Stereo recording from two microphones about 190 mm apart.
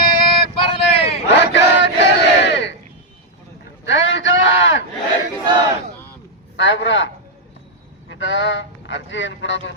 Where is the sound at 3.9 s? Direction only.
80° left.